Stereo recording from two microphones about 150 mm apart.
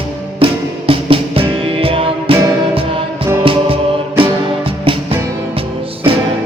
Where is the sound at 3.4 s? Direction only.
35° right (ahead or behind).